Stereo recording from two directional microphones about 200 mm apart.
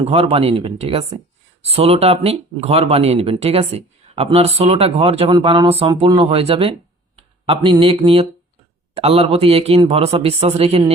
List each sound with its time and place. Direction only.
0.0 s speech: 30° right (ahead or behind)